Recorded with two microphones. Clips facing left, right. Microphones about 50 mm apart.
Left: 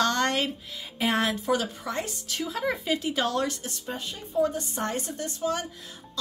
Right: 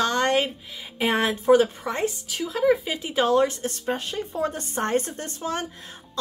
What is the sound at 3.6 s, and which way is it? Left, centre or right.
Speech, right.